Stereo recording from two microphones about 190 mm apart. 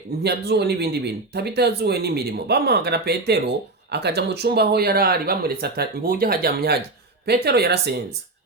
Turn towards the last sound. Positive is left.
turn(degrees=-60)  # may be behind; listen again after turning